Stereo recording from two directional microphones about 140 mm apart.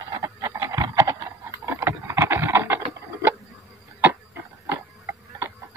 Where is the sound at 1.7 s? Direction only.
20° right (ahead or behind).